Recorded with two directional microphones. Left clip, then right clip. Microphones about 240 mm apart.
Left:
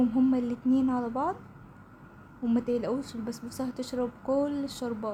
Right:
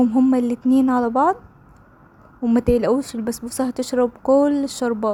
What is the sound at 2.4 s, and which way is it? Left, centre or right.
Speech, right.